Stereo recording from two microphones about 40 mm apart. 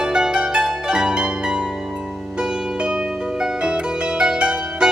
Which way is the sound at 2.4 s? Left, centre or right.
Right.